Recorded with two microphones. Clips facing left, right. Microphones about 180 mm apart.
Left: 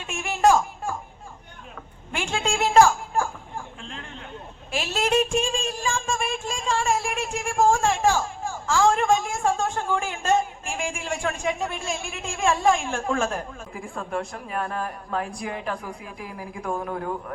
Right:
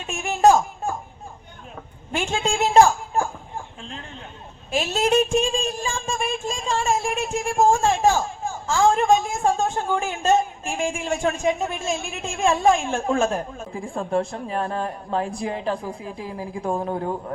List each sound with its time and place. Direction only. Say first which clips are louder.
0.1 s a sound: right 3 dB; 25° right (ahead or behind)
2.5 s speech: right 1 dB; 20° right (ahead or behind)
4.7 s a woman's voice: right 3 dB; 25° right (ahead or behind)